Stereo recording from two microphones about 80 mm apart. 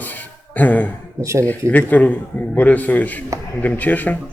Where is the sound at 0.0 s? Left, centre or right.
Left.